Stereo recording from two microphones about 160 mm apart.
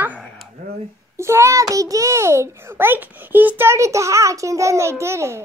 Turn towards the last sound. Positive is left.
turn(degrees=-15)  # may be behind; listen again after turning